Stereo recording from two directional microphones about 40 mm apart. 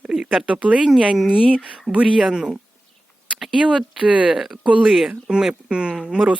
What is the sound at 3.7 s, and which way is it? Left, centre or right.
Speech, right.